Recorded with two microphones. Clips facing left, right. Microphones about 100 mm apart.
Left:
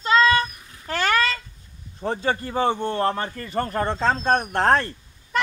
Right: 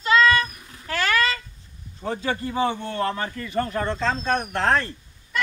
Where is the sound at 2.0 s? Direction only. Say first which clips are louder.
Left 2 dB; 35° left (ahead or behind).